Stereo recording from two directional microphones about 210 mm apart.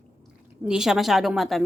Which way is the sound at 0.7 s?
Centre (ahead or behind).